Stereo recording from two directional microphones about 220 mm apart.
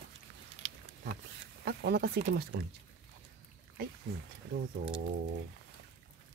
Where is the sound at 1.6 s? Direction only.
45° right (ahead or behind).